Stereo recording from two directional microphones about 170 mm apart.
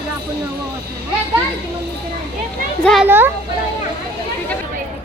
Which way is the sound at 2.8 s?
Centre (ahead or behind).